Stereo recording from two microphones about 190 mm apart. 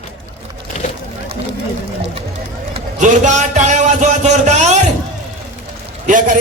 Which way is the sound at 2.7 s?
40° right (ahead or behind).